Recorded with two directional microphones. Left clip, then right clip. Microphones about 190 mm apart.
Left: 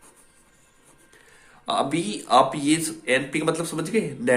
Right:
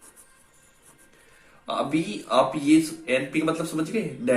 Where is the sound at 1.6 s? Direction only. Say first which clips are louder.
Left 2 dB; 60° left (ahead or behind).